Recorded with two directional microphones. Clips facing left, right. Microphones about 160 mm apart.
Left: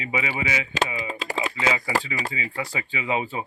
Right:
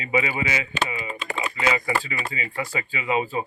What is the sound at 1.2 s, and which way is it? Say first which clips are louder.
Speech: left 1 dB; 90° left.